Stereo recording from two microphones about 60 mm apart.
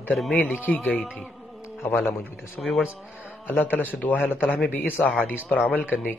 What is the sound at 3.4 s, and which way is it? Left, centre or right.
A man's voice, left.